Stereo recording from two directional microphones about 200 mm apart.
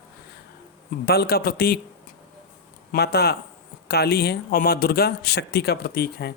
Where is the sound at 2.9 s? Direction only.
55° left (ahead or behind).